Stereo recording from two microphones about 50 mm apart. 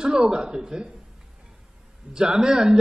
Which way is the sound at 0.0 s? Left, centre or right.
Centre.